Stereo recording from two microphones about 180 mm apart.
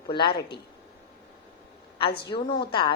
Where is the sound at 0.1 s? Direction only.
25° left (ahead or behind).